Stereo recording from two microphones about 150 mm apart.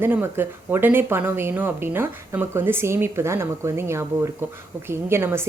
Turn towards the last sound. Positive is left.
turn(degrees=-15)  # may be behind; listen again after turning